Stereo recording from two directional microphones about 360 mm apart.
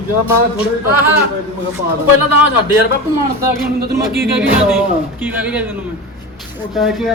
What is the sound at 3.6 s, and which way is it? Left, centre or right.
Speech, right.